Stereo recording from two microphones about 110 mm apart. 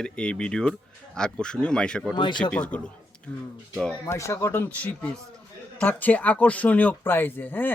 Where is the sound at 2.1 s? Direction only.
45° left (ahead or behind).